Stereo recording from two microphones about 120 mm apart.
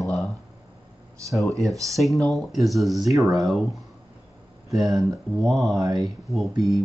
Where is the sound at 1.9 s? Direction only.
Centre (ahead or behind).